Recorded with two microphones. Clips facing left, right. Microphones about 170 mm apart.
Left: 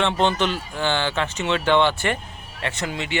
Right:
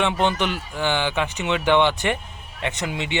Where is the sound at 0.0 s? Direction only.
15° right (ahead or behind).